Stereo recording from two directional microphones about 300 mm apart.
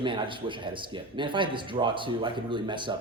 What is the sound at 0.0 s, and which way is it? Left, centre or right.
Speech, centre.